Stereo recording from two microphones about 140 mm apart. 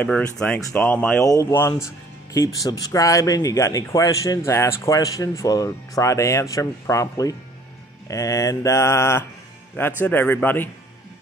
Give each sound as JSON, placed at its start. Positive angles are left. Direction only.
{"t": 0.0, "sound": "a man's voice", "side_deg": 5}
{"t": 1.2, "sound": "a man's voice", "side_deg": 25}